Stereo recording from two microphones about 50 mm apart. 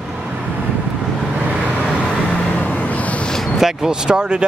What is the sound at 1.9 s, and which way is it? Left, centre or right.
Vehicle, left.